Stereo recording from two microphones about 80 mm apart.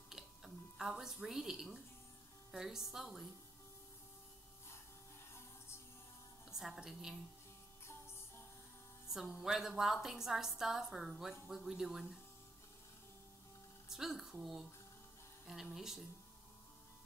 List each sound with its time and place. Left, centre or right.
0.1 s a sound: centre
2.5 s a woman's voice: centre
6.5 s a woman's voice: centre
7.8 s music: left
9.4 s a woman's voice: centre
13.8 s a woman's voice: centre
15.4 s a woman's voice: centre